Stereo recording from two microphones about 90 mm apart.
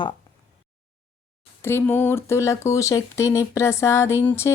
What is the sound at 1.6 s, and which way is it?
Speech, 25° left (ahead or behind).